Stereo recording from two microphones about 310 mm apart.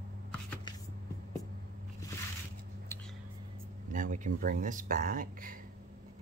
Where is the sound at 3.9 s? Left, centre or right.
Right.